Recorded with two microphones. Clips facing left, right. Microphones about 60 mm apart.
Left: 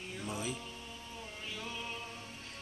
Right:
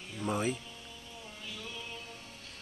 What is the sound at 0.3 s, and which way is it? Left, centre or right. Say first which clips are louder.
Speech: right 8 dB; right.